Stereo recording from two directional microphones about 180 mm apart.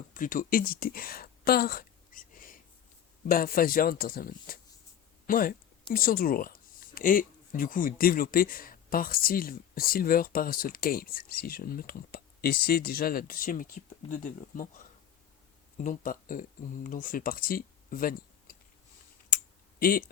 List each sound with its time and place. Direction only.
0.1 s speech: 50° left (ahead or behind)
15.8 s speech: 50° left (ahead or behind)
19.8 s speech: 55° left (ahead or behind)